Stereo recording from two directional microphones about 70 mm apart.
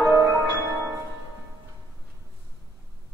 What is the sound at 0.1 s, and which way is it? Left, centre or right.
Music, right.